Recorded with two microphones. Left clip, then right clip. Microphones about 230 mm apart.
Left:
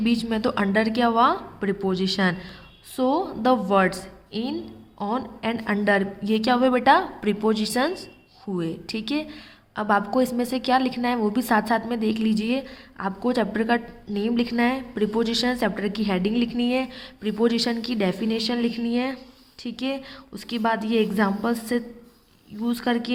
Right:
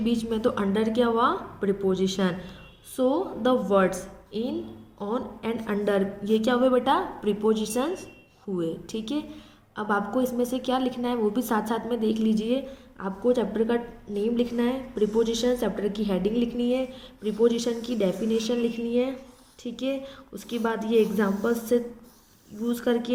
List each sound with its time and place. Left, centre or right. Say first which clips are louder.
0.3 s a woman's voice: left 1 dB; left